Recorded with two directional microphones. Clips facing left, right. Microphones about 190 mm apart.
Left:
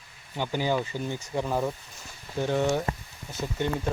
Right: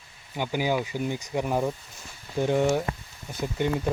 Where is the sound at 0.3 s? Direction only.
10° right (ahead or behind).